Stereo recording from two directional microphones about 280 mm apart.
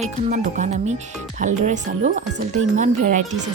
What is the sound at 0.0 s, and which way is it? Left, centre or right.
Speech, right.